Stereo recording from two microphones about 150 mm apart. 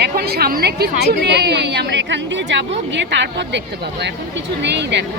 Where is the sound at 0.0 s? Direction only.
90° right.